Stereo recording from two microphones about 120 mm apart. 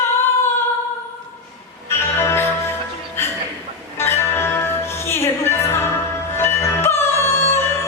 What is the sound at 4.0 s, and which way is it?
Music, 20° left (ahead or behind).